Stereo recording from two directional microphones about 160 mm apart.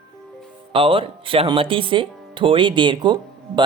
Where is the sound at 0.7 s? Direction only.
35° right (ahead or behind).